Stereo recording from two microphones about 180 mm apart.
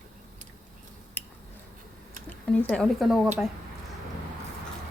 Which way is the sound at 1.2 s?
10° left (ahead or behind).